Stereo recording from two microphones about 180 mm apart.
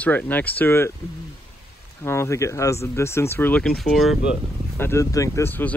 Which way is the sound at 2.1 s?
15° left (ahead or behind).